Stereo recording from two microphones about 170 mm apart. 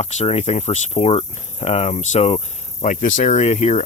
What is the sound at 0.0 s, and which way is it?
Speech, 40° left (ahead or behind).